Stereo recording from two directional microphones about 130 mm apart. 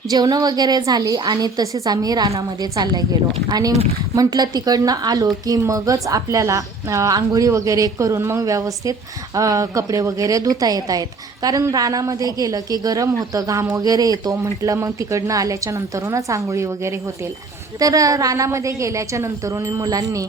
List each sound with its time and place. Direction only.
0.1 s speech: 30° right (ahead or behind)